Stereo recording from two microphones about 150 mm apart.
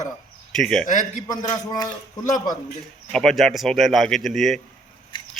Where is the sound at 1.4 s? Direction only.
30° left (ahead or behind).